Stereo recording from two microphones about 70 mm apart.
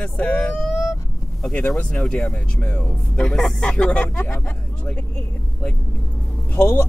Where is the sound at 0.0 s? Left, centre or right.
Centre.